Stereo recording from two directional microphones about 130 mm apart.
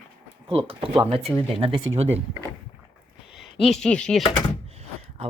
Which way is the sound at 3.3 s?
Centre (ahead or behind).